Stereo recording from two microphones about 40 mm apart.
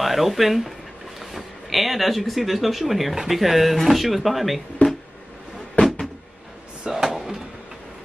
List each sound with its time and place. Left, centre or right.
0.0 s speech: centre
5.8 s cupboard open or close: left
6.8 s drawer open or close: right
7.2 s a sound: centre